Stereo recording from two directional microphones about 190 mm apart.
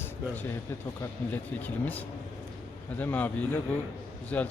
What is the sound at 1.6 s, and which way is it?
A man's voice, 10° left (ahead or behind).